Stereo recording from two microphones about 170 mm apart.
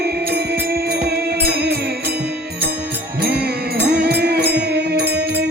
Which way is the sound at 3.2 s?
70° right (ahead or behind).